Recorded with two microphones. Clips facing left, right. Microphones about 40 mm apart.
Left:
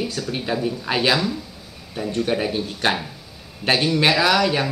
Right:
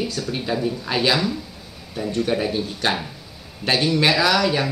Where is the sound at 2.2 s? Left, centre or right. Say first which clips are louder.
Even; centre.